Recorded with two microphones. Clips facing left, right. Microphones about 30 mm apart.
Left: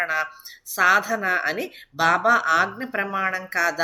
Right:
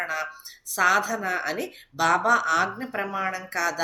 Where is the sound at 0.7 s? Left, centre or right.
Centre.